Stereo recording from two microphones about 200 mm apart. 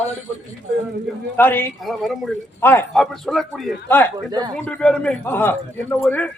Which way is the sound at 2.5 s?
10° left (ahead or behind).